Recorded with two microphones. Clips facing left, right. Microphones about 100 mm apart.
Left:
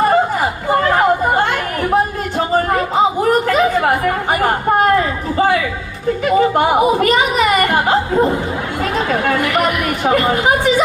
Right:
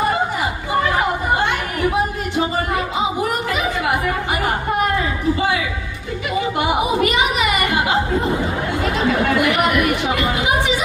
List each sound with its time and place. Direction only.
3.5 s chatter: 45° left (ahead or behind)
6.2 s speech: 45° left (ahead or behind)
10.0 s speech: 45° left (ahead or behind)